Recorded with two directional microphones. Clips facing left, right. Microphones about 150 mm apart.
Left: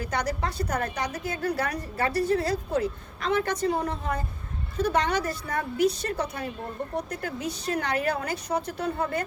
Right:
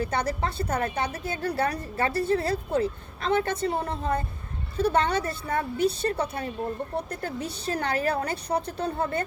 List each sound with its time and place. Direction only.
0.0 s a woman's voice: 30° right (ahead or behind)